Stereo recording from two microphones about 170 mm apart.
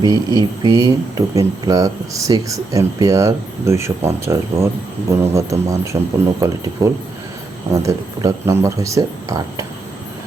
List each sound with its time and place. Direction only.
0.0 s speech: 20° right (ahead or behind)